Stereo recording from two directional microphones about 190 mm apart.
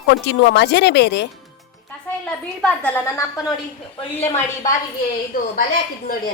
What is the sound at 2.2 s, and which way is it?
A woman's voice, 10° left (ahead or behind).